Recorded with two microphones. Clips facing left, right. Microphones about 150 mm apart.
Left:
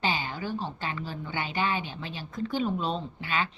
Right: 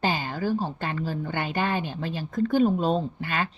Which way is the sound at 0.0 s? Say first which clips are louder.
Right 4 dB; 45° right (ahead or behind).